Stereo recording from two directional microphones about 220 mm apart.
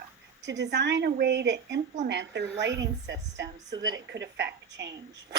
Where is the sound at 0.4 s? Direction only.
50° right (ahead or behind).